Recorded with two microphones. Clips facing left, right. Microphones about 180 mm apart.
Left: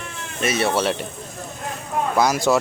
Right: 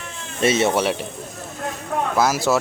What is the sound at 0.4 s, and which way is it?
Speech, 20° right (ahead or behind).